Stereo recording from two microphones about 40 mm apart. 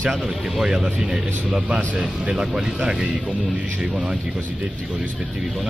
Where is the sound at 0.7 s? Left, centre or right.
Centre.